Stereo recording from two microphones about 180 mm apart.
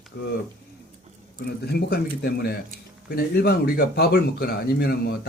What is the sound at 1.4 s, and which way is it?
Speech, 60° left (ahead or behind).